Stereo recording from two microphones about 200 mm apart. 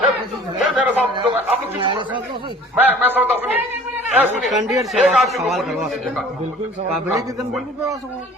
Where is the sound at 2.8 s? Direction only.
10° right (ahead or behind).